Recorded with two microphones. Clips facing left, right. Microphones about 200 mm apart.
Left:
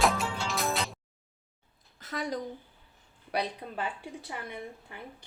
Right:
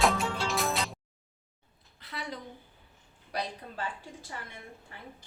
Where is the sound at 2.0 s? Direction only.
45° left (ahead or behind).